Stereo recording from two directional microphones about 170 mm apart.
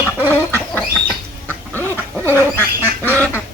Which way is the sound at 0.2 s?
10° right (ahead or behind).